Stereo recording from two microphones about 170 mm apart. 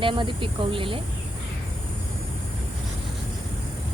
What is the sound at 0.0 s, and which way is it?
Speech, 30° right (ahead or behind).